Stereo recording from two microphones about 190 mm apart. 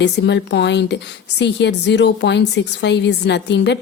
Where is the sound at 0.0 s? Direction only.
65° left (ahead or behind).